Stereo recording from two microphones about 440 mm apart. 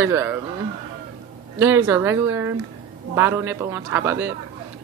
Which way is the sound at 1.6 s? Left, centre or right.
Centre.